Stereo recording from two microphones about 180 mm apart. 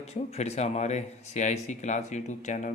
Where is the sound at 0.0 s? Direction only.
35° left (ahead or behind).